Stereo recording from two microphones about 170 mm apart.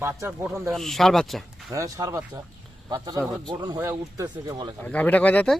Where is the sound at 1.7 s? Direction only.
20° right (ahead or behind).